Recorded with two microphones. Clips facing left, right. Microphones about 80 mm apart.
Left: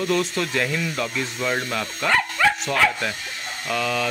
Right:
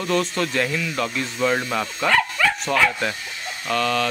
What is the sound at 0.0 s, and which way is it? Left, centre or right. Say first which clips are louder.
Speech: right 1 dB; centre.